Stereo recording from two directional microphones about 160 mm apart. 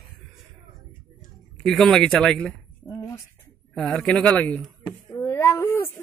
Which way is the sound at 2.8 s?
20° left (ahead or behind).